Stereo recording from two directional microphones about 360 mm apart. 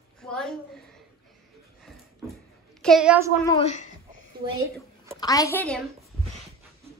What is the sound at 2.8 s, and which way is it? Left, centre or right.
Speech, centre.